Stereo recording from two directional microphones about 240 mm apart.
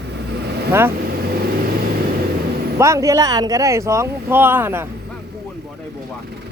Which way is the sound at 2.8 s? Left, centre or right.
Centre.